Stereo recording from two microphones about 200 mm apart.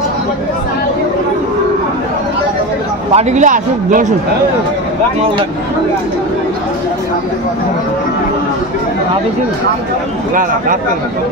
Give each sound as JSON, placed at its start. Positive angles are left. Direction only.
{"t": 3.2, "sound": "a man's voice", "side_deg": -35}